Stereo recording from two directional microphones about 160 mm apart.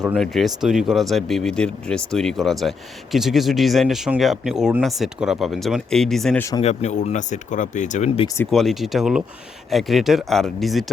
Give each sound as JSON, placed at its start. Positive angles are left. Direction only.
{"t": 0.0, "sound": "speech", "side_deg": 0}
{"t": 6.6, "sound": "speech", "side_deg": 45}
{"t": 8.4, "sound": "speech", "side_deg": 0}